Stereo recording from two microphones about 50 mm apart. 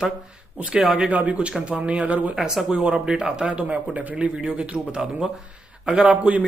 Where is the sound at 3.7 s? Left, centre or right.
Right.